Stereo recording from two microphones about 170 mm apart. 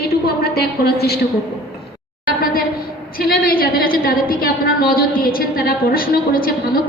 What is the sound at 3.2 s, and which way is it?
A woman's voice, 60° left (ahead or behind).